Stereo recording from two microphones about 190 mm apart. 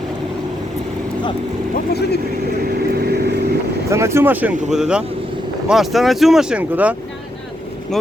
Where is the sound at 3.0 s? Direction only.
55° right (ahead or behind).